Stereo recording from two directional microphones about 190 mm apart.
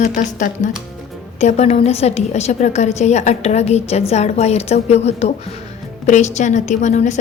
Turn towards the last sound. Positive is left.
turn(degrees=40)  # may be behind; listen again after turning